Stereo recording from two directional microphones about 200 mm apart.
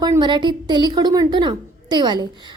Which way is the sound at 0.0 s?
20° right (ahead or behind).